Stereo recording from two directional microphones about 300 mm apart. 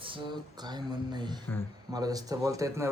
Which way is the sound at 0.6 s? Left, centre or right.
Centre.